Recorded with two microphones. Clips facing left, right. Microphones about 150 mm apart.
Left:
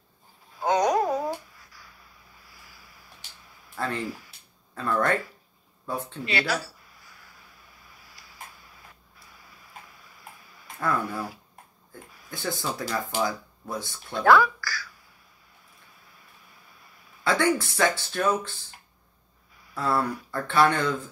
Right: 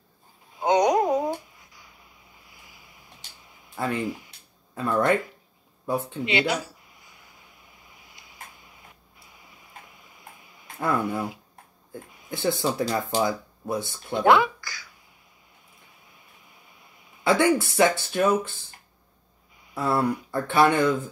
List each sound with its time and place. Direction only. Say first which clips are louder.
0.6 s a sound: right 2 dB; 20° right (ahead or behind)
4.7 s speech: right 3 dB; 15° right (ahead or behind)
5.9 s a sound: right 5 dB; 20° right (ahead or behind)
12.1 s speech: right 6 dB; 20° right (ahead or behind)
17.2 s speech: right 3 dB; 15° right (ahead or behind)
19.7 s speech: right 2 dB; 20° right (ahead or behind)